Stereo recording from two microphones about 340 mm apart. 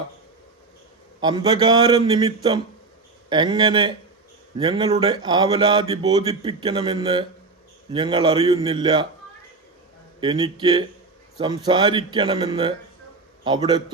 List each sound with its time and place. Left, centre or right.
1.2 s speech: centre
10.2 s a man's voice: centre